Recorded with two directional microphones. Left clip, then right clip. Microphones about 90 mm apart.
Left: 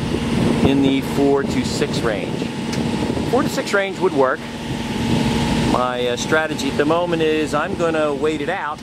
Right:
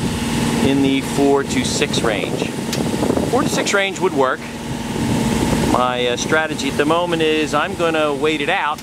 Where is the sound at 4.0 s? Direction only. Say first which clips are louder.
Even; 30° right (ahead or behind).